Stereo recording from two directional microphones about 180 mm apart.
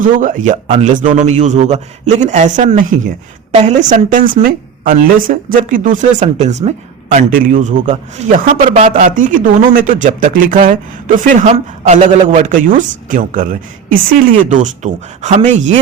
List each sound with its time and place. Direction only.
0.0 s a woman's voice: 45° right (ahead or behind)